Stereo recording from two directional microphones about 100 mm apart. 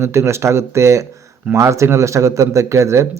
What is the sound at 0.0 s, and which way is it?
Speech, 30° right (ahead or behind).